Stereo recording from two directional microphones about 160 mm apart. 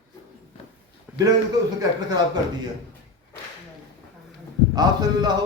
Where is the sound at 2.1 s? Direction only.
25° right (ahead or behind).